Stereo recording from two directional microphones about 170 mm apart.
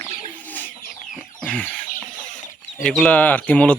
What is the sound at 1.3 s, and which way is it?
Chicken, 5° left (ahead or behind).